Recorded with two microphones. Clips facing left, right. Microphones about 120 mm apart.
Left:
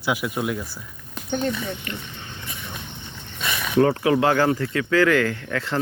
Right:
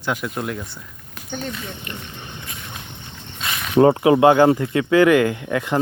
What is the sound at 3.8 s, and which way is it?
Speech, 25° right (ahead or behind).